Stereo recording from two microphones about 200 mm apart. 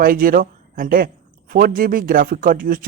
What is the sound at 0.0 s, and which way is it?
A man's voice, 45° right (ahead or behind).